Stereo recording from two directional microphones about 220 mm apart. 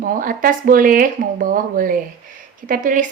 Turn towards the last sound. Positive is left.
turn(degrees=-35)  # may be behind; listen again after turning